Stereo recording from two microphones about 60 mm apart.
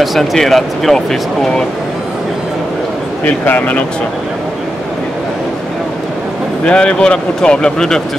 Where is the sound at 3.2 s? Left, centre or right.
Left.